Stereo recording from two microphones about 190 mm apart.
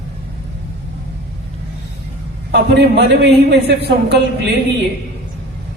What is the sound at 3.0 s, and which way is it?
Speech, 65° right (ahead or behind).